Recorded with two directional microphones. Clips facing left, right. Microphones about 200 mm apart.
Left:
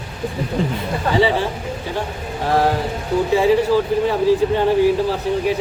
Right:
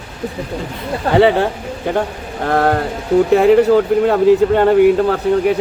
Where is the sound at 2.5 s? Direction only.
60° right (ahead or behind).